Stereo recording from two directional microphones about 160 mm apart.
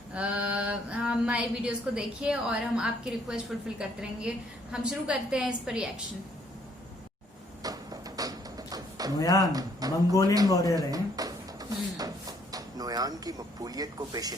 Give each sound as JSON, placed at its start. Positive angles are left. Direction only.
{"t": 0.1, "sound": "a sound", "side_deg": -5}
{"t": 7.6, "sound": "music", "side_deg": -20}
{"t": 9.1, "sound": "speech", "side_deg": 20}
{"t": 9.5, "sound": "speech", "side_deg": -25}
{"t": 10.5, "sound": "speech", "side_deg": 20}
{"t": 10.8, "sound": "speech", "side_deg": -25}
{"t": 11.9, "sound": "a sound", "side_deg": -25}